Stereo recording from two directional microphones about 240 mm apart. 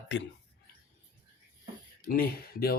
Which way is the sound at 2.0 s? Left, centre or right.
Left.